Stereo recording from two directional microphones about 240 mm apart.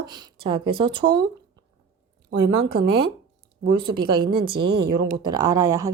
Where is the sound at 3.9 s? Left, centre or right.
Centre.